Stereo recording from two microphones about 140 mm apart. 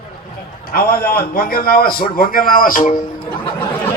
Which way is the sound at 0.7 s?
90° left.